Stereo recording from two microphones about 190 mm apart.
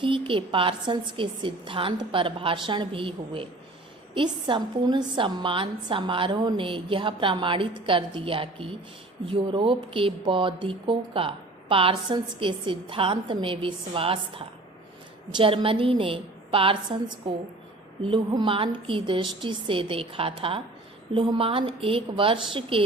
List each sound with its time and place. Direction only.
0.0 s speech: 25° right (ahead or behind)